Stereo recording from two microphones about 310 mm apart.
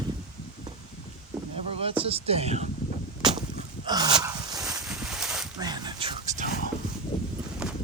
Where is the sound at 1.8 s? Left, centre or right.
Centre.